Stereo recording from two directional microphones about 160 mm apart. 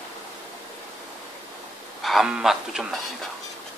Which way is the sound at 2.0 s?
5° right (ahead or behind).